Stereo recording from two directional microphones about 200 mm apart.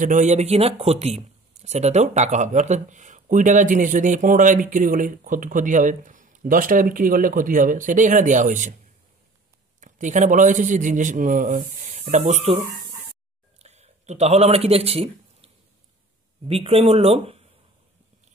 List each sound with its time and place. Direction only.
0.0 s speech: 40° right (ahead or behind)
9.8 s speech: 40° right (ahead or behind)
13.6 s a sound: 35° right (ahead or behind)
16.4 s speech: 30° right (ahead or behind)